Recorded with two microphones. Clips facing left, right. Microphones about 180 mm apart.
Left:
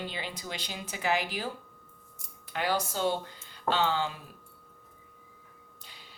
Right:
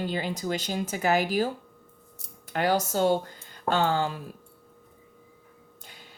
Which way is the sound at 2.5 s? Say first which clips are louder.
Right 6 dB; 45° right (ahead or behind).